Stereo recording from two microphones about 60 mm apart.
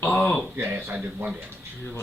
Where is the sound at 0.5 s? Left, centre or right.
Right.